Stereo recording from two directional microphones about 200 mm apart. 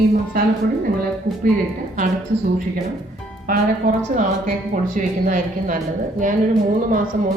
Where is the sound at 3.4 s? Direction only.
45° right (ahead or behind).